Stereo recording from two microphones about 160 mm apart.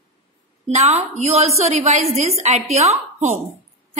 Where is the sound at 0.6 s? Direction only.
45° right (ahead or behind).